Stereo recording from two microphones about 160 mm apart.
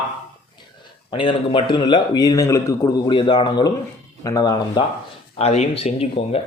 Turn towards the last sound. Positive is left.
turn(degrees=40)  # may be behind; listen again after turning